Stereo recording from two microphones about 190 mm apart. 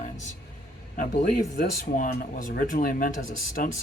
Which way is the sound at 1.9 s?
45° left (ahead or behind).